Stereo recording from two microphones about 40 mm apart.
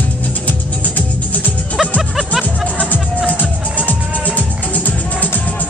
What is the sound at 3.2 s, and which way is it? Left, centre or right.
Music, left.